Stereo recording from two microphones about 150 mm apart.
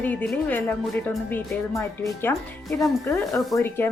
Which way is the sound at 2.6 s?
Centre (ahead or behind).